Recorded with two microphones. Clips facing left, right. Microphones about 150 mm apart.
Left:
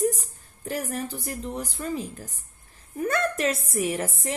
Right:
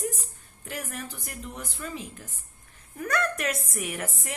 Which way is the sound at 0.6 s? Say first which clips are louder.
Left 7 dB; 35° left (ahead or behind).